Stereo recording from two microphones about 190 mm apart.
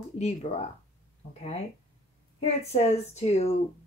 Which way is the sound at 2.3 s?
35° left (ahead or behind).